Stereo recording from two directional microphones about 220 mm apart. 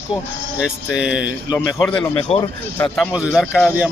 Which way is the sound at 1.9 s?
25° left (ahead or behind).